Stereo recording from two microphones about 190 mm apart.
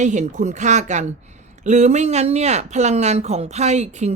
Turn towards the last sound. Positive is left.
turn(degrees=-35)  # may be behind; listen again after turning